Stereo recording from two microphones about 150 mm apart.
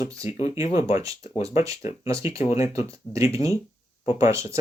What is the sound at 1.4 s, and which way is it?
Speech, 20° right (ahead or behind).